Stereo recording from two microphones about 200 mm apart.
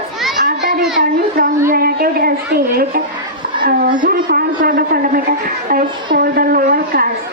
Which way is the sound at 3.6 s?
45° right (ahead or behind).